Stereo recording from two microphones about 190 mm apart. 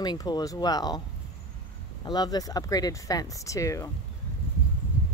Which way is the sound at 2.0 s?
20° left (ahead or behind).